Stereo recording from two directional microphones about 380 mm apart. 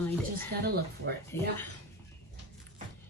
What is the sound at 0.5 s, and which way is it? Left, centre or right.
Speech, right.